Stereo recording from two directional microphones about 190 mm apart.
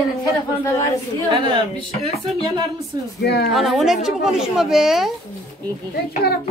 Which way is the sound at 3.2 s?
55° left (ahead or behind).